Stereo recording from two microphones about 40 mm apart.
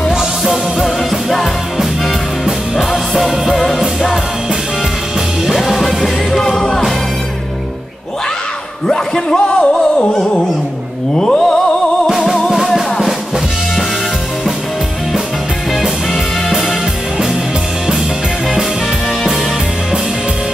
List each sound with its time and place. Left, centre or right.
0.5 s music: centre
2.4 s music: centre
5.5 s music: centre
8.8 s a sound: centre
9.4 s music: left
12.2 s music: centre
15.8 s music: centre